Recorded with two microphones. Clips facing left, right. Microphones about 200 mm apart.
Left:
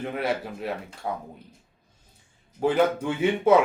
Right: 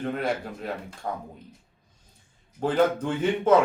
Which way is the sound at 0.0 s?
5° left (ahead or behind).